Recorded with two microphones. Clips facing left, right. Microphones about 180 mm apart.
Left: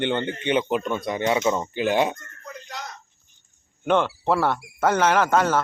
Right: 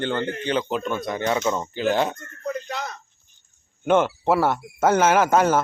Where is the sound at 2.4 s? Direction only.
65° right (ahead or behind).